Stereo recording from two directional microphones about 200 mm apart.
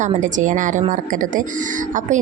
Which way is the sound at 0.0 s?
40° right (ahead or behind).